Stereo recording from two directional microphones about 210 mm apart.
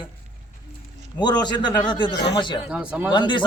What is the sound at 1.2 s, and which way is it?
Speech, 20° left (ahead or behind).